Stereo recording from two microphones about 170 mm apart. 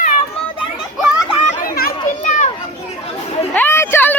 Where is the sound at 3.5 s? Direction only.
15° left (ahead or behind).